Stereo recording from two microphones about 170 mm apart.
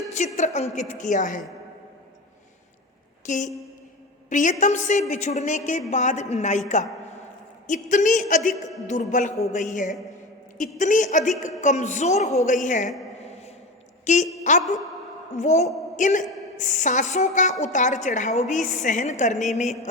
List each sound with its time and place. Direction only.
0.3 s a woman's voice: 40° left (ahead or behind)
3.2 s a woman's voice: 45° left (ahead or behind)
13.2 s a sound: 40° left (ahead or behind)
14.0 s a woman's voice: 45° left (ahead or behind)